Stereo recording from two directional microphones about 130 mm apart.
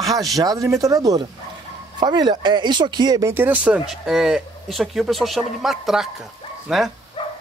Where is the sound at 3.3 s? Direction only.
15° right (ahead or behind).